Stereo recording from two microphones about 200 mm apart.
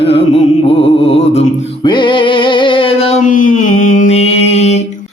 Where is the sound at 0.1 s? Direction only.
30° left (ahead or behind).